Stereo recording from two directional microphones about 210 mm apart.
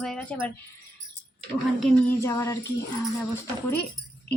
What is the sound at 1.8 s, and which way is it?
Speech, 5° left (ahead or behind).